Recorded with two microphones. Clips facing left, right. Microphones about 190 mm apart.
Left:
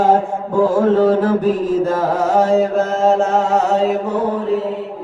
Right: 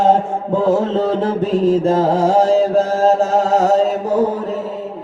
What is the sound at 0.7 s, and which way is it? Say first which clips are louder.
Music: left 3 dB; 25° right (ahead or behind).